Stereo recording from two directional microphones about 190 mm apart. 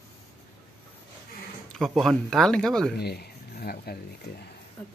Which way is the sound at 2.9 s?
60° left (ahead or behind).